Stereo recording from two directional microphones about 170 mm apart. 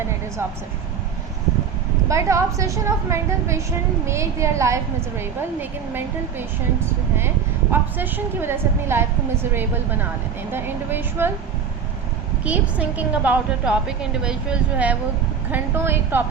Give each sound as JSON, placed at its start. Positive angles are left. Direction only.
{"t": 2.0, "sound": "a woman's voice", "side_deg": -20}
{"t": 7.7, "sound": "a woman's voice", "side_deg": -10}
{"t": 12.5, "sound": "a woman's voice", "side_deg": -10}